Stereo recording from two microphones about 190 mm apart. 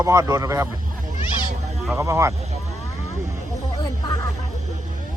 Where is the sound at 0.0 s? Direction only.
15° right (ahead or behind).